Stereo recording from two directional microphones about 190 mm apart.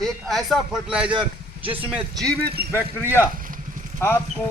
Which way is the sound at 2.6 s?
55° right (ahead or behind).